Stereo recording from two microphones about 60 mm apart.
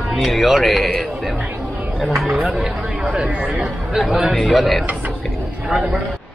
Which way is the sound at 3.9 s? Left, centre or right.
Centre.